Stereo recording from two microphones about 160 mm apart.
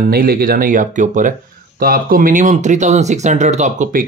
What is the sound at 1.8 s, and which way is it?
Speech, 65° right (ahead or behind).